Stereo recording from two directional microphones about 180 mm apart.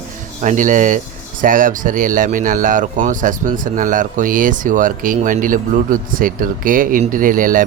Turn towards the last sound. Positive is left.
turn(degrees=-50)  # may be behind; listen again after turning